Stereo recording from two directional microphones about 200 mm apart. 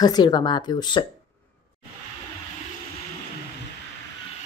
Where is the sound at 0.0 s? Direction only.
20° left (ahead or behind).